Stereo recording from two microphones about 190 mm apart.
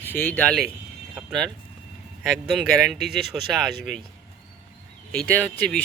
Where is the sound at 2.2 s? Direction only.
Centre (ahead or behind).